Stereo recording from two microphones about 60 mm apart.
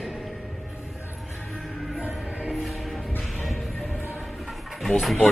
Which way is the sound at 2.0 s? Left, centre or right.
Right.